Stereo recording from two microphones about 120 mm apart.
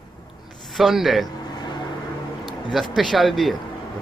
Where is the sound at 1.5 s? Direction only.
40° left (ahead or behind).